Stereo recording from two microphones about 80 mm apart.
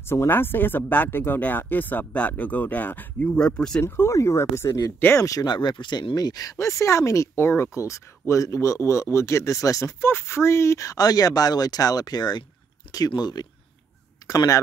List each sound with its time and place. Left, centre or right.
0.0 s speech: left
3.3 s speech: centre
3.8 s speech: left
5.5 s speech: left